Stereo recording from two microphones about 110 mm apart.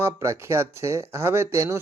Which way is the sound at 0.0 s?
25° right (ahead or behind).